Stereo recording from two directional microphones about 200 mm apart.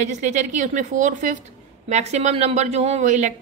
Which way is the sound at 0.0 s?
35° right (ahead or behind).